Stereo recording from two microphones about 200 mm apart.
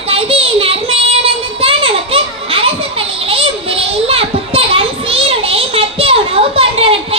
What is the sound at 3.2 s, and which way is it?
Children playing, 30° right (ahead or behind).